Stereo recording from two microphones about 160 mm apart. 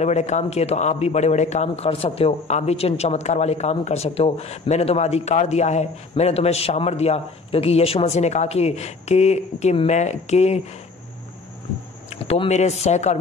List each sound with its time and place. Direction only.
0.0 s speech: 45° left (ahead or behind)
12.1 s speech: 40° left (ahead or behind)